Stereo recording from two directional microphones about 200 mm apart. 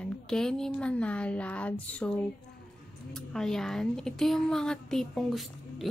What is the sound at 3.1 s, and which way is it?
Speech, centre (ahead or behind).